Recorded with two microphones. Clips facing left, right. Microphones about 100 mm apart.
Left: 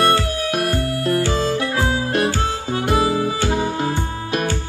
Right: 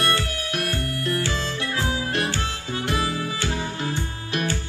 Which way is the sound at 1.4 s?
45° left (ahead or behind).